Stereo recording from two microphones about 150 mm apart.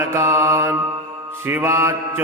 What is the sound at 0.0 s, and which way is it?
Mantra, 15° right (ahead or behind).